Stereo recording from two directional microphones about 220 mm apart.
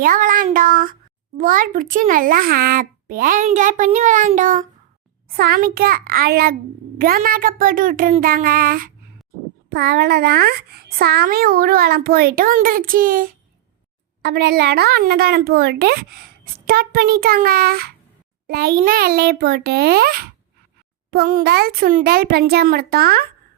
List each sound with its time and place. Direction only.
0.0 s a child's voice: 40° right (ahead or behind)